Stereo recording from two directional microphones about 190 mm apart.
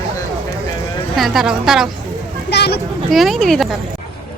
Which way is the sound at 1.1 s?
Centre (ahead or behind).